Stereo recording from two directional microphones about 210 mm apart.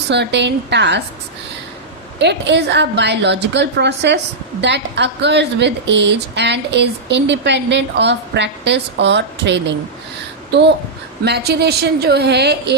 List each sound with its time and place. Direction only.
0.1 s speech: 55° right (ahead or behind)
2.1 s a woman's voice: 55° right (ahead or behind)